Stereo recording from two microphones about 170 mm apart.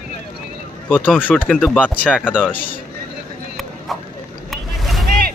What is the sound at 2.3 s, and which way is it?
Speech, 5° right (ahead or behind).